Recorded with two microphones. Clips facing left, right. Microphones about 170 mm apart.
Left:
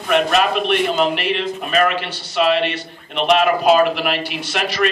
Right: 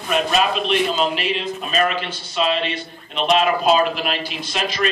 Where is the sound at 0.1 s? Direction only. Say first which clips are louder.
Left 3 dB; 60° left (ahead or behind).